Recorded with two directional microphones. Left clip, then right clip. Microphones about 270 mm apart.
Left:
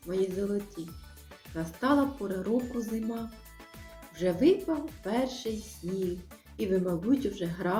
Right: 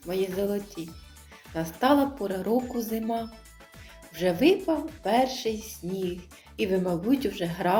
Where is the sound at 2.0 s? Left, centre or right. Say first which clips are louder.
Right 3 dB; centre.